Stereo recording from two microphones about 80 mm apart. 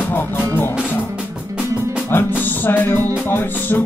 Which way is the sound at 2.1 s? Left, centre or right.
Left.